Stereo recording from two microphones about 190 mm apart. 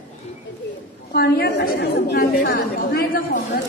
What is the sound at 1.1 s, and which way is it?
A woman's voice, 55° left (ahead or behind).